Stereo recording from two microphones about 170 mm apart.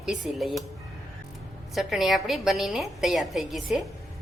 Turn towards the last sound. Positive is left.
turn(degrees=0)  # may be behind; listen again after turning